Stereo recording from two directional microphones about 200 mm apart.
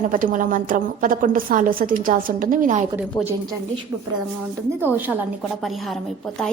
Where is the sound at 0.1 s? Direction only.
45° right (ahead or behind).